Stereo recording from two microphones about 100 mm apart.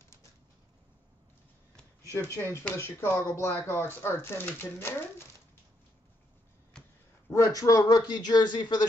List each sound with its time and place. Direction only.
0.0 s bird: 30° left (ahead or behind)
2.0 s speech: 30° left (ahead or behind)
6.7 s a sound: 5° left (ahead or behind)
7.3 s a man's voice: 35° left (ahead or behind)